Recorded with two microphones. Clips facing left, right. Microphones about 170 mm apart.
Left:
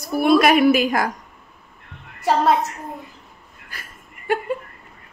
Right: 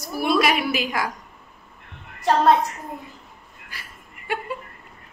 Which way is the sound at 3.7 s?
45° left (ahead or behind).